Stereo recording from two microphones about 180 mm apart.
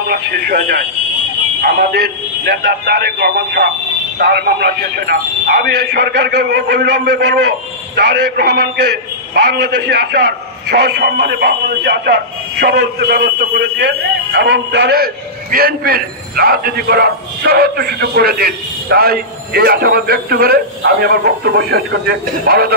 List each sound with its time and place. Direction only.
0.1 s a man's voice: 60° right (ahead or behind)
10.7 s a man's voice: 60° right (ahead or behind)